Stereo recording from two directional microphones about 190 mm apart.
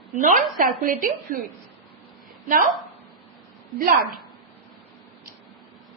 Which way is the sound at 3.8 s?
50° right (ahead or behind).